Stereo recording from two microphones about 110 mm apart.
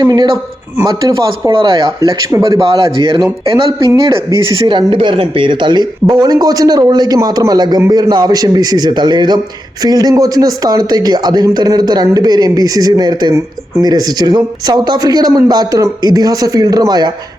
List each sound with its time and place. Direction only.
0.0 s speech: 35° right (ahead or behind)
1.5 s a man's voice: 45° right (ahead or behind)